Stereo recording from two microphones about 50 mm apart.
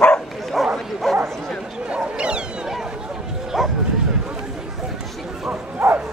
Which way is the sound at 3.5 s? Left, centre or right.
Centre.